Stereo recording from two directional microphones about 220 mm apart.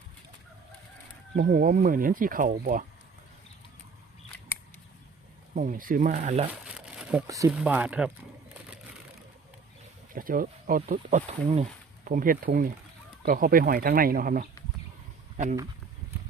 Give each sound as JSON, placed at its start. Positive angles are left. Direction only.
{"t": 1.4, "sound": "speech", "side_deg": -40}
{"t": 5.5, "sound": "speech", "side_deg": -40}
{"t": 6.5, "sound": "crumpling", "side_deg": -5}
{"t": 7.3, "sound": "speech", "side_deg": -15}
{"t": 10.1, "sound": "speech", "side_deg": -40}